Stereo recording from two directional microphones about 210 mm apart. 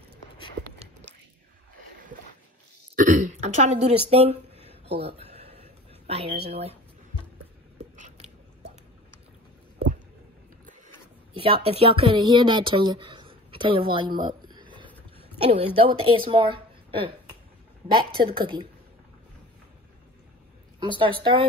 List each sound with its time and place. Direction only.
3.0 s speech: 35° right (ahead or behind)
4.1 s a sound: 30° right (ahead or behind)
7.9 s biting: 35° right (ahead or behind)
11.3 s a woman's voice: 25° right (ahead or behind)
18.2 s a woman's voice: 25° right (ahead or behind)
20.8 s a woman's voice: 25° right (ahead or behind)